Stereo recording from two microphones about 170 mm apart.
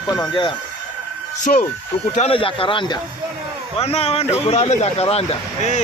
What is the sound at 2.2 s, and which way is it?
Speech, 35° left (ahead or behind).